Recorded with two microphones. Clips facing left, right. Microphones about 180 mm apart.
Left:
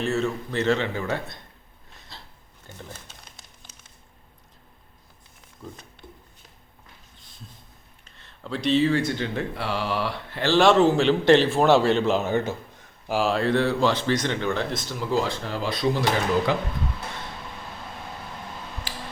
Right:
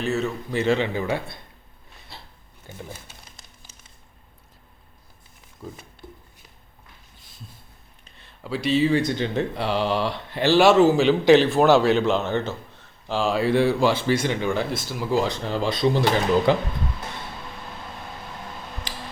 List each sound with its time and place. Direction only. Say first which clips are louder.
0.0 s speech: even; centre (ahead or behind)
2.7 s speech: right 3 dB; 10° right (ahead or behind)
8.0 s speech: right 1 dB; 10° right (ahead or behind)
15.6 s speech: right 3 dB; 25° right (ahead or behind)